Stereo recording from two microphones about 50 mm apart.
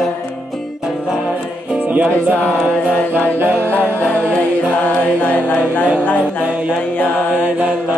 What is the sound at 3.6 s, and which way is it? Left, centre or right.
Music, left.